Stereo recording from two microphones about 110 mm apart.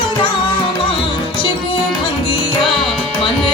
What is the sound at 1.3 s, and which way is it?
Music, 50° left (ahead or behind).